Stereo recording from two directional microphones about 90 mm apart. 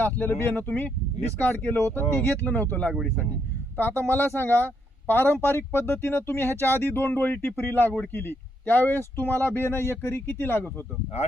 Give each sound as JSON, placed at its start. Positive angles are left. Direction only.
{"t": 0.0, "sound": "speech", "side_deg": 20}